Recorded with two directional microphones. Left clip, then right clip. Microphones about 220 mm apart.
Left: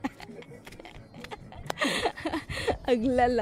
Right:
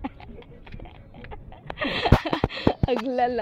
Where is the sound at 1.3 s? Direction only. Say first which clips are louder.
Left 2 dB; 10° left (ahead or behind).